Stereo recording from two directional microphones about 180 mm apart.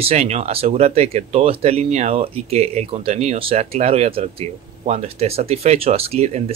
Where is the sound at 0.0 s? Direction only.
35° right (ahead or behind).